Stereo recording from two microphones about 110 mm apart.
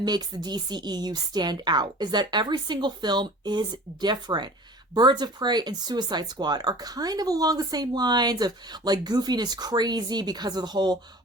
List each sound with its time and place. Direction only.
0.0 s speech: 40° right (ahead or behind)